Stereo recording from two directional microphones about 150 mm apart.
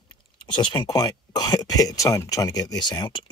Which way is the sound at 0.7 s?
25° left (ahead or behind).